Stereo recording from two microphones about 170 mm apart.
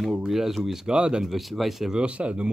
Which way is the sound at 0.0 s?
Centre (ahead or behind).